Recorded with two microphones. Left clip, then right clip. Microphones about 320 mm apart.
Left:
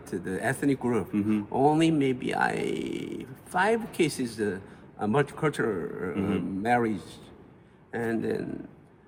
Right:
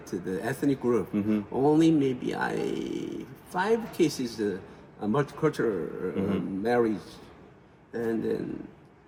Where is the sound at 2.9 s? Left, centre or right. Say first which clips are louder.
Right 1 dB; left.